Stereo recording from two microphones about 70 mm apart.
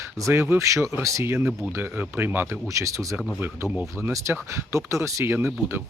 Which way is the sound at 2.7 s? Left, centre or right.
Right.